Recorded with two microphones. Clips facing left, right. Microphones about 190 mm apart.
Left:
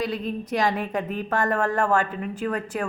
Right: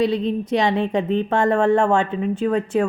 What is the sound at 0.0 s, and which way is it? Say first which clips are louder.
A woman's voice: right 8 dB; 25° right (ahead or behind).